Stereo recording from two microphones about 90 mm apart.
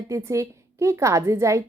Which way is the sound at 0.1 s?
35° right (ahead or behind).